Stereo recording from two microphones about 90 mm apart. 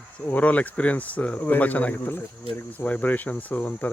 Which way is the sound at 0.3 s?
15° left (ahead or behind).